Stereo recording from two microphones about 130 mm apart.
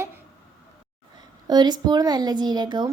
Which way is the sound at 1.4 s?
35° right (ahead or behind).